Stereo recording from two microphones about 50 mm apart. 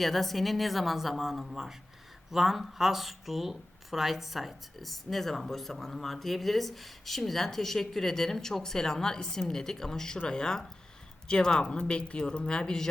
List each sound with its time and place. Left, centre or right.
0.0 s speech: centre